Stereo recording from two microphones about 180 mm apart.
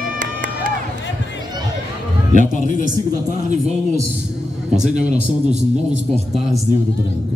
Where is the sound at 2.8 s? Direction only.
45° right (ahead or behind).